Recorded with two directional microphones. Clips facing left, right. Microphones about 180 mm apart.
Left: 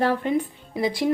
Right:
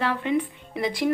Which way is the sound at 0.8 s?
30° left (ahead or behind).